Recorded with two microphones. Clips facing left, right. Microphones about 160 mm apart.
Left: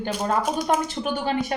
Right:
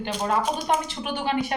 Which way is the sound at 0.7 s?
45° left (ahead or behind).